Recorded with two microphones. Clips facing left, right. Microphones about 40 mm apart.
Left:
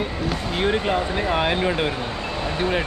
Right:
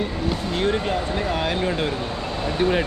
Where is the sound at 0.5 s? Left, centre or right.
Centre.